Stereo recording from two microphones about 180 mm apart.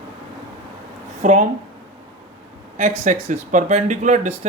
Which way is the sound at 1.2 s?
45° right (ahead or behind).